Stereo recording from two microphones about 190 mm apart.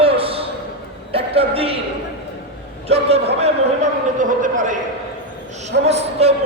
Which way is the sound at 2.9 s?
30° right (ahead or behind).